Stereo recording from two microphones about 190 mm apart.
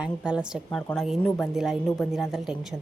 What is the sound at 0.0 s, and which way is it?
Speech, 5° right (ahead or behind).